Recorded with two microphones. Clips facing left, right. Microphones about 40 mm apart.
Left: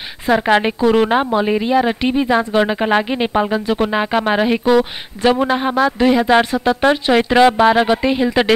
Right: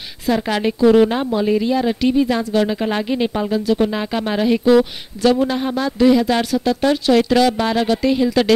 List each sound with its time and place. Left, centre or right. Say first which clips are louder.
0.4 s speech: left 1 dB; left